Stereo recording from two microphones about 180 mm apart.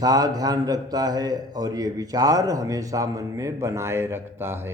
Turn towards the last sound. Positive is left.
turn(degrees=-15)  # may be behind; listen again after turning